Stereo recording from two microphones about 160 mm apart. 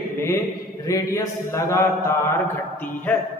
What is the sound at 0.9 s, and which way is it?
Mantra, 20° left (ahead or behind).